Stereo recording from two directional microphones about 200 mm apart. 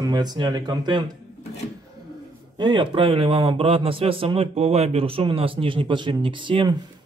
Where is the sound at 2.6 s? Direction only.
20° right (ahead or behind).